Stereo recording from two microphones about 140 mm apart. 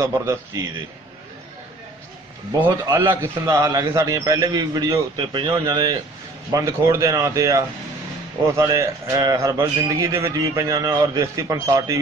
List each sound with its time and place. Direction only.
0.0 s a man's voice: 20° right (ahead or behind)
3.0 s a man's voice: 20° right (ahead or behind)